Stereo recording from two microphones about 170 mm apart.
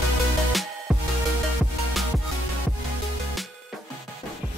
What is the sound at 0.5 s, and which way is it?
Music, centre (ahead or behind).